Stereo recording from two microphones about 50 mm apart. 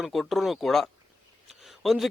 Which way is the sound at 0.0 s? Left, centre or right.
Centre.